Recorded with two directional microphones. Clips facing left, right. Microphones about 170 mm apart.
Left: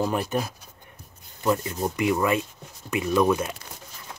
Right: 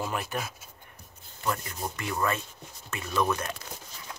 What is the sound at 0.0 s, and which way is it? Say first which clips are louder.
Speech: left 7 dB; 15° left (ahead or behind).